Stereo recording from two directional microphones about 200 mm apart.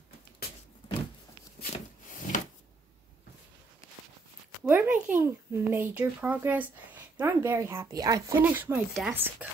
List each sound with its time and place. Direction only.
4.6 s a child's voice: 10° right (ahead or behind)